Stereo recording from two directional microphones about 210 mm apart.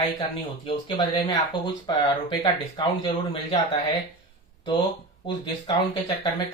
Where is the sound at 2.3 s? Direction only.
20° left (ahead or behind).